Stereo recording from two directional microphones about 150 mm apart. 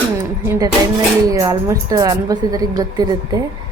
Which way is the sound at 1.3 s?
20° right (ahead or behind).